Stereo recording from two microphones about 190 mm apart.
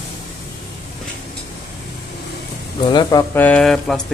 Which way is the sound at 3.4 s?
5° left (ahead or behind).